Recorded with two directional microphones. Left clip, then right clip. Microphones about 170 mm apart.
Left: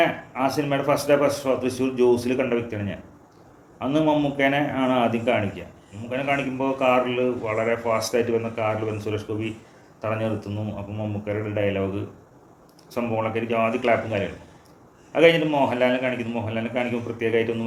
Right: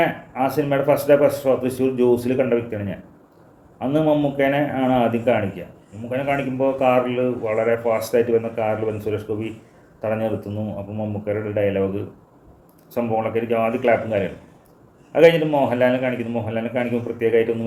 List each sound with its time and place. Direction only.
0.0 s a man's voice: 20° right (ahead or behind)
12.9 s a man's voice: 20° right (ahead or behind)